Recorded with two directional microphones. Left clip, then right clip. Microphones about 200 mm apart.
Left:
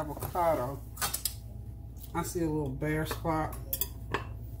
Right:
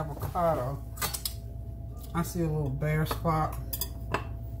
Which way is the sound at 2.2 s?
30° left (ahead or behind).